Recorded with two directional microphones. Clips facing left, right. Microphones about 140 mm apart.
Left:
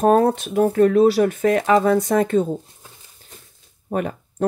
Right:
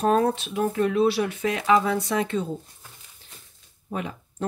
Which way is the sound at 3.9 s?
50° left (ahead or behind).